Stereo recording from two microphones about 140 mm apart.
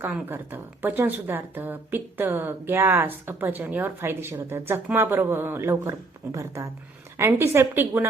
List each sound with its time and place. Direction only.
0.0 s a woman's voice: 15° right (ahead or behind)